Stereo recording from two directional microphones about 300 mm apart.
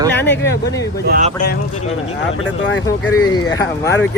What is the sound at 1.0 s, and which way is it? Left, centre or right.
Speech, right.